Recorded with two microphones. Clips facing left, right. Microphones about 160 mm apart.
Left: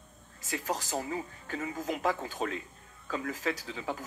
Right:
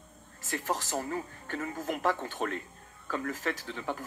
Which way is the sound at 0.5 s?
50° right (ahead or behind).